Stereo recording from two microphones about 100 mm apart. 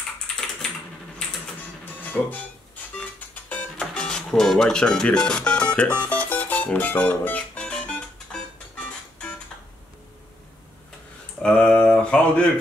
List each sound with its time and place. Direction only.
0.3 s typing: 5° left (ahead or behind)
2.3 s music: 15° left (ahead or behind)
3.9 s speech: 10° left (ahead or behind)
6.0 s music: 15° left (ahead or behind)
11.4 s mantra: 10° left (ahead or behind)